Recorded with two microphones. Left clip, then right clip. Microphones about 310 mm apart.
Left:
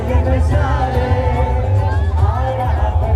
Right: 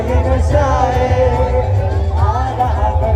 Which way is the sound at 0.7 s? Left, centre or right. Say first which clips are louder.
Right 3 dB; right.